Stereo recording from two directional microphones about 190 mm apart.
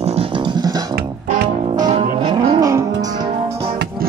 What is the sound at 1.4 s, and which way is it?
Music, 25° right (ahead or behind).